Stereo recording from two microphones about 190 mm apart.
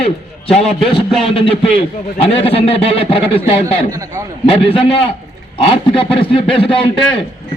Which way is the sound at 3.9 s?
15° right (ahead or behind).